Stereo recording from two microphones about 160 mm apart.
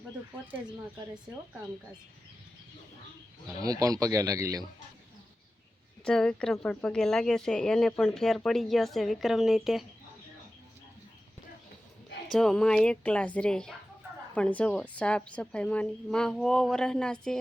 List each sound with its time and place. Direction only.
3.4 s speech: 20° right (ahead or behind)
6.1 s speech: 5° left (ahead or behind)
12.3 s speech: centre (ahead or behind)